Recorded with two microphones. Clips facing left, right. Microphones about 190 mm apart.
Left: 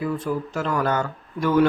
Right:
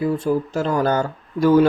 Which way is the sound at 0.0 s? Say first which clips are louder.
Right 5 dB; 30° right (ahead or behind).